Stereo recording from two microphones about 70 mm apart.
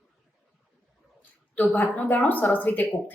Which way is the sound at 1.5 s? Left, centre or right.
Left.